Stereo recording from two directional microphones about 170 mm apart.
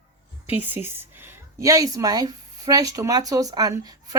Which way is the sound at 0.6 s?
10° right (ahead or behind).